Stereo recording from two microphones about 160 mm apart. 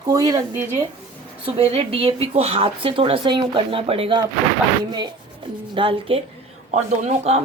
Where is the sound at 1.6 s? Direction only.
35° right (ahead or behind).